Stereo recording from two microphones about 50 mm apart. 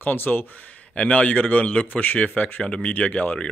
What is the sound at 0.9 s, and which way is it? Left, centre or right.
Speech, left.